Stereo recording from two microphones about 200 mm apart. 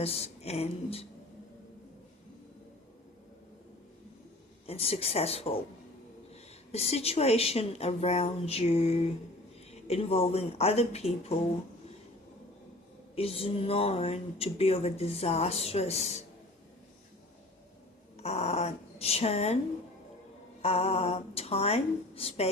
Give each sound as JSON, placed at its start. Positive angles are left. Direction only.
{"t": 0.0, "sound": "speech", "side_deg": 30}
{"t": 4.6, "sound": "speech", "side_deg": 30}
{"t": 6.7, "sound": "speech", "side_deg": 30}
{"t": 13.1, "sound": "speech", "side_deg": 30}
{"t": 18.2, "sound": "speech", "side_deg": 30}
{"t": 20.6, "sound": "speech", "side_deg": 30}